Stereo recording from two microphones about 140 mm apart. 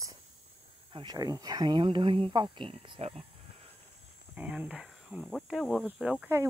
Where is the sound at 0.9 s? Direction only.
30° right (ahead or behind); by 3.3 s 45° right (ahead or behind).